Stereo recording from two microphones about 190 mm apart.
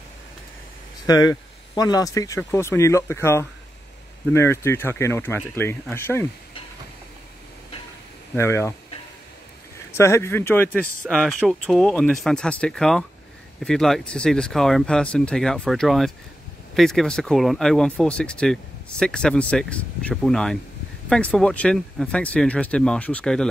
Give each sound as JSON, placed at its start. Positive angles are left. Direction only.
{"t": 1.0, "sound": "speech", "side_deg": 20}
{"t": 8.4, "sound": "speech", "side_deg": 15}
{"t": 9.9, "sound": "speech", "side_deg": 15}